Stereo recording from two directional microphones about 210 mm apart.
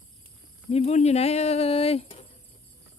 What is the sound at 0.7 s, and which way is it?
Speech, 30° left (ahead or behind).